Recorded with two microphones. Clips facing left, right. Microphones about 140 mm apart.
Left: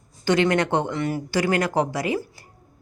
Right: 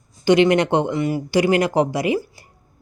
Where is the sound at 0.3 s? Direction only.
15° right (ahead or behind).